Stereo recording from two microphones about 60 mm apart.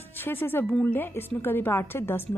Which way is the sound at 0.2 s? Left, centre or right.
Left.